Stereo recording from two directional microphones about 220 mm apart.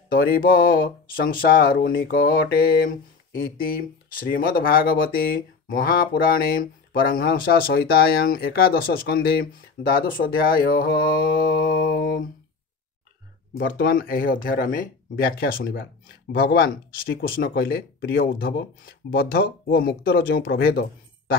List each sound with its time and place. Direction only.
0.1 s speech: 40° left (ahead or behind)
4.1 s speech: 40° left (ahead or behind)
13.6 s speech: 45° left (ahead or behind)